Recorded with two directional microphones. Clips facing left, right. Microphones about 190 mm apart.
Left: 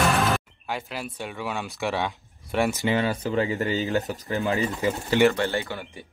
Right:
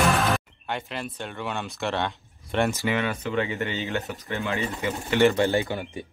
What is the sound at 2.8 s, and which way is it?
Speech, 35° left (ahead or behind).